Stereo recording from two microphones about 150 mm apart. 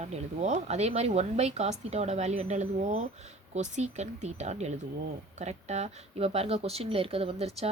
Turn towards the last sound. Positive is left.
turn(degrees=-40)  # may be behind; listen again after turning